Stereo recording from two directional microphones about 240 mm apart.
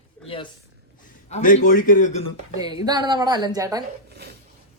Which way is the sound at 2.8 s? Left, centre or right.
Centre.